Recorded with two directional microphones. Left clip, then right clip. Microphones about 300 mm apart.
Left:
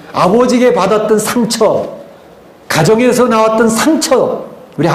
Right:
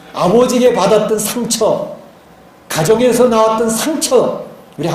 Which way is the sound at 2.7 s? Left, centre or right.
Left.